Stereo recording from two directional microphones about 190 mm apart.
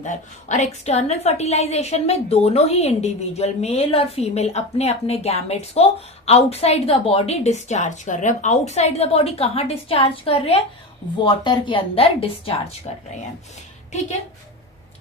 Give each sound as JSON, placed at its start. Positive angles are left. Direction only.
{"t": 0.0, "sound": "a woman's voice", "side_deg": 40}